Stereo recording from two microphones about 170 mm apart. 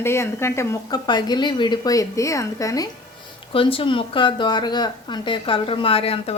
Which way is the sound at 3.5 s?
30° left (ahead or behind).